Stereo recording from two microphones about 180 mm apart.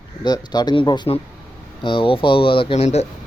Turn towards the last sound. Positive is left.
turn(degrees=35)  # may be behind; listen again after turning